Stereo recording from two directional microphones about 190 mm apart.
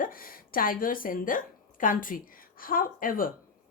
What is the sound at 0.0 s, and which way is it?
A woman's voice, 50° left (ahead or behind).